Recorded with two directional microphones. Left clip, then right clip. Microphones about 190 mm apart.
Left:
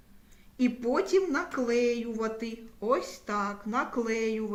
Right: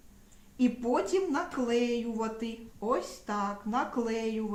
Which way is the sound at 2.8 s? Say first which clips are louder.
Left 3 dB; 30° right (ahead or behind).